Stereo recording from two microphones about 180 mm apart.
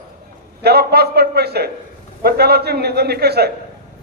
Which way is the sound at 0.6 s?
65° right (ahead or behind).